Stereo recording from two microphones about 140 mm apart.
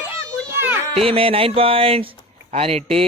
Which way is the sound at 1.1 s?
40° right (ahead or behind).